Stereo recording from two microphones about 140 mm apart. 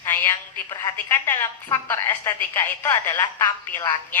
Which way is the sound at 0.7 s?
25° left (ahead or behind).